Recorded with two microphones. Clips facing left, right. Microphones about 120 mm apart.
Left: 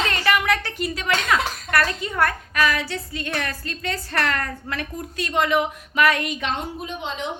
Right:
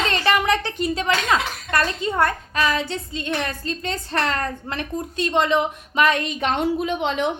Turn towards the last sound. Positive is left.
turn(degrees=-65)  # may be behind; listen again after turning